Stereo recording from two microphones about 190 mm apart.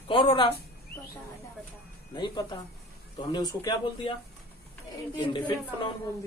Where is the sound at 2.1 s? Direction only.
25° left (ahead or behind).